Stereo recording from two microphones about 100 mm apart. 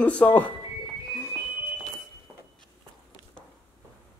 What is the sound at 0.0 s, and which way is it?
Speech, 15° left (ahead or behind).